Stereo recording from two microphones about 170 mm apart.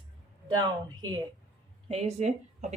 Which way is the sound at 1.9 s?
40° right (ahead or behind).